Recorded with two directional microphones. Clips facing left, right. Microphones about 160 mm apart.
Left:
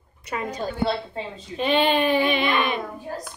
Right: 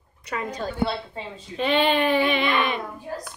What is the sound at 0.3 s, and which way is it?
Speech, 10° left (ahead or behind).